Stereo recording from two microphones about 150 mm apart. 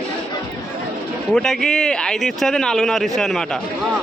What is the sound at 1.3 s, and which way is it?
Speech, 5° left (ahead or behind).